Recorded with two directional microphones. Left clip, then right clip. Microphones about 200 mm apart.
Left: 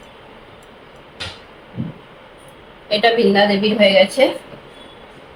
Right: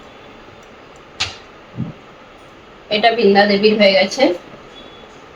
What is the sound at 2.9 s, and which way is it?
A woman's voice, 15° left (ahead or behind).